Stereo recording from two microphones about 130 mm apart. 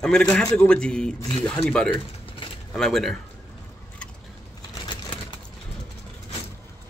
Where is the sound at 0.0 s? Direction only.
5° left (ahead or behind).